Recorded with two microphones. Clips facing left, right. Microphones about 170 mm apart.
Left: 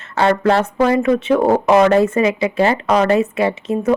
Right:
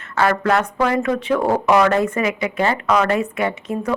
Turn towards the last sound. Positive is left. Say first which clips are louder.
# left 5 dB
turn(degrees=25)  # may be behind; listen again after turning